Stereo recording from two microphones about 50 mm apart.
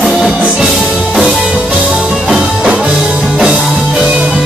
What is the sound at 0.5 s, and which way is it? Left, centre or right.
Music, centre.